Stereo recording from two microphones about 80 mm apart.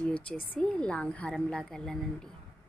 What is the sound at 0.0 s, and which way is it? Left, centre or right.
A woman's voice, centre.